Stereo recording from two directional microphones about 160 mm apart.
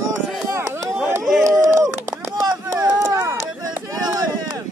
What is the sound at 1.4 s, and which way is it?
Run, 20° right (ahead or behind).